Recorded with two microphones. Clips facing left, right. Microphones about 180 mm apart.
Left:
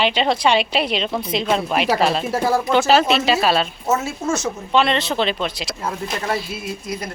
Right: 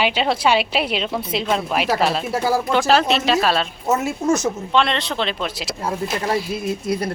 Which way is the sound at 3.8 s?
15° right (ahead or behind).